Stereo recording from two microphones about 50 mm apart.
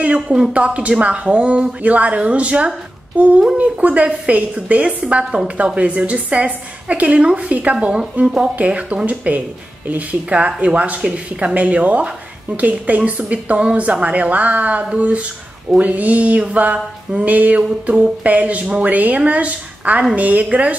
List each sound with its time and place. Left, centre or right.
0.0 s a woman's voice: centre
15.8 s a sound: right
17.8 s a woman's voice: right